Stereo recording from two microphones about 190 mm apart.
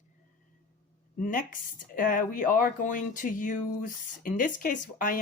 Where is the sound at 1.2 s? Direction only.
45° left (ahead or behind).